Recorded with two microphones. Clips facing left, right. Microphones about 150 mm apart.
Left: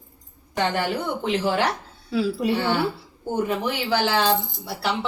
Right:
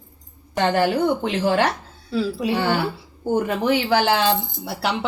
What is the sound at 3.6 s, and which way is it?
Speech, 55° right (ahead or behind).